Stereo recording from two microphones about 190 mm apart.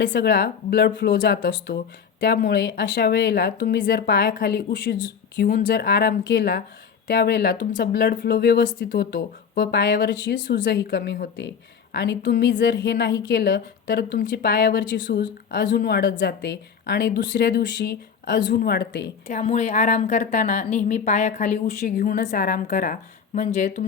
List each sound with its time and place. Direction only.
0.1 s speech: 55° left (ahead or behind)
10.5 s a woman's voice: 60° left (ahead or behind); by 16.0 s 45° left (ahead or behind)
16.1 s a woman's voice: 60° left (ahead or behind)
18.5 s a woman's voice: 50° left (ahead or behind)
19.3 s a woman's voice: 35° left (ahead or behind)